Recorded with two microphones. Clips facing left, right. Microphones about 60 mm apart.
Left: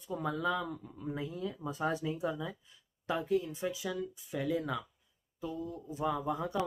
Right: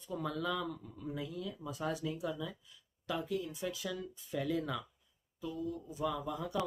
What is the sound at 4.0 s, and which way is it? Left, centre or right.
Speech, centre.